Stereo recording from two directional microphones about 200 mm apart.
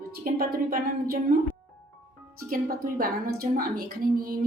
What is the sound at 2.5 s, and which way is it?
A woman's voice, 45° right (ahead or behind).